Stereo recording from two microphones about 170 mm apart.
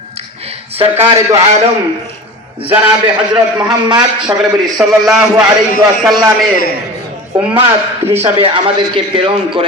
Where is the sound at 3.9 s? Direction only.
25° right (ahead or behind).